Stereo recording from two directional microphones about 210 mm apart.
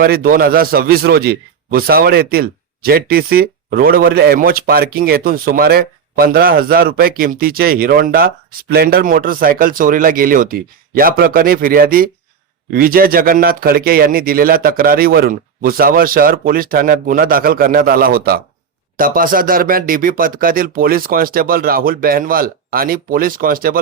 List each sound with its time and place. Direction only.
0.0 s a man's voice: 45° right (ahead or behind)